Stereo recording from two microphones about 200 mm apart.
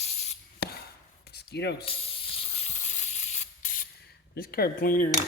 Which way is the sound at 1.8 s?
30° left (ahead or behind).